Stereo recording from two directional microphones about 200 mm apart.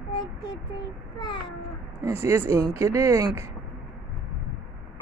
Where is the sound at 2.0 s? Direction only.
15° right (ahead or behind).